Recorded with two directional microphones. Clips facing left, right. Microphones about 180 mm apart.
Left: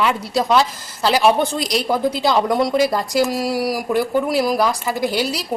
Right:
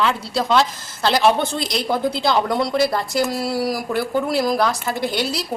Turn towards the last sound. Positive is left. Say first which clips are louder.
# left 2 dB
turn(degrees=10)  # may be behind; listen again after turning